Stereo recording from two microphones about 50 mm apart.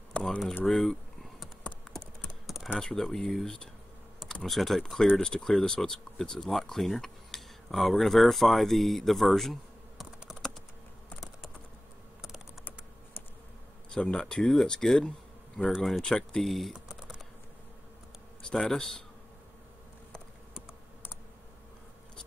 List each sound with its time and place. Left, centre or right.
0.1 s typing: left
0.7 s speech: centre
2.4 s typing: centre
2.8 s speech: centre
5.1 s speech: centre
13.9 s speech: centre
18.4 s a sound: centre
18.7 s speech: centre